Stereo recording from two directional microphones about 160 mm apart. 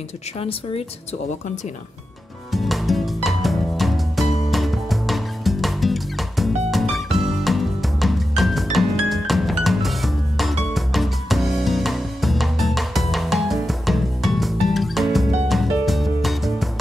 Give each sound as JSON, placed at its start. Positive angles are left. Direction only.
{"t": 0.4, "sound": "speech", "side_deg": 35}
{"t": 2.5, "sound": "music", "side_deg": 0}